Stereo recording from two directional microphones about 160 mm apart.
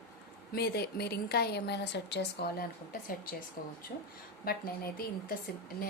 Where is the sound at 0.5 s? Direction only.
85° left.